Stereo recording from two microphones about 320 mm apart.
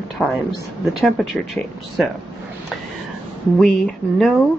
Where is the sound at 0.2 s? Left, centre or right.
Centre.